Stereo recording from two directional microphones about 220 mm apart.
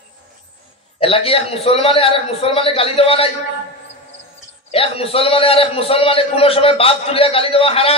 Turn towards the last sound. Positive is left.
turn(degrees=25)  # may be behind; listen again after turning